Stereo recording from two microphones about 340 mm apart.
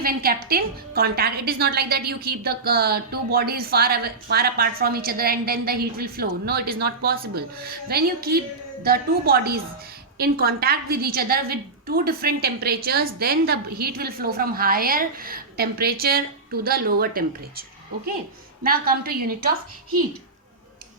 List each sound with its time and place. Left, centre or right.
0.0 s a woman's voice: right